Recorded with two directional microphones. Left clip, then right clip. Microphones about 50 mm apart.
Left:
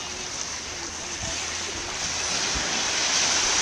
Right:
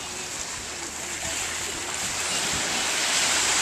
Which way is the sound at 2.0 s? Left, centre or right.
Centre.